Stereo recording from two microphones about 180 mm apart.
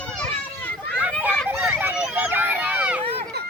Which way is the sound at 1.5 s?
Centre (ahead or behind).